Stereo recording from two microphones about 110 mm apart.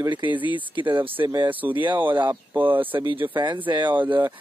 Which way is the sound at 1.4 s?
15° right (ahead or behind).